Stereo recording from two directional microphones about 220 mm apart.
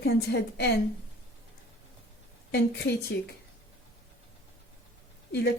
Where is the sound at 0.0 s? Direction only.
45° left (ahead or behind).